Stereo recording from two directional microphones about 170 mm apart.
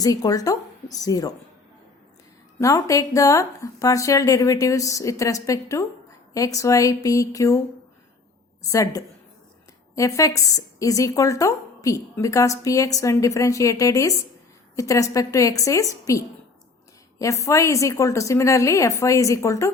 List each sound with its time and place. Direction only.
0.0 s speech: 20° left (ahead or behind)
2.6 s speech: 20° left (ahead or behind)
8.6 s speech: 20° left (ahead or behind)